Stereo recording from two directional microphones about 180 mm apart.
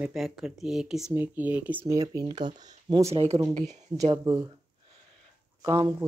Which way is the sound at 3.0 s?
35° right (ahead or behind).